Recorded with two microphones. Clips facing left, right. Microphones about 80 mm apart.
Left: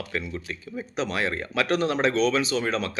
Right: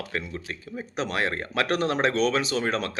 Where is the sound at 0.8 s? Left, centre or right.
Right.